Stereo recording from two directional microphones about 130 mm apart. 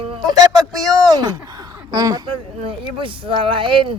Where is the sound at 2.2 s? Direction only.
40° right (ahead or behind).